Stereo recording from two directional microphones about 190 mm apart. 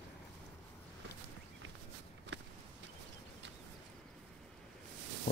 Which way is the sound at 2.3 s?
65° right (ahead or behind).